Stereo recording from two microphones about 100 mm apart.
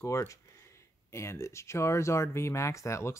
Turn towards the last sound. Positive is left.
turn(degrees=30)  # may be behind; listen again after turning